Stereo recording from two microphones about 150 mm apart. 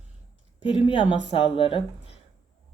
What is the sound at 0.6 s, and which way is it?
Speech, 35° left (ahead or behind).